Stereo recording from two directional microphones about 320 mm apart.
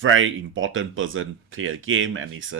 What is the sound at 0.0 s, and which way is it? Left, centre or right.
Speech, right.